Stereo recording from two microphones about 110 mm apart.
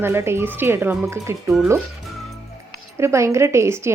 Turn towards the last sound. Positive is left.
turn(degrees=-25)  # may be behind; listen again after turning